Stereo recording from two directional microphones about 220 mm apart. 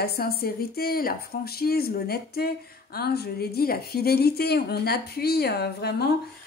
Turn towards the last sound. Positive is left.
turn(degrees=45)  # may be behind; listen again after turning